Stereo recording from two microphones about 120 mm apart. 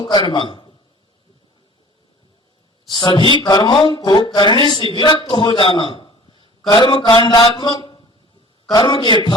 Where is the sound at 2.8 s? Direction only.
40° left (ahead or behind).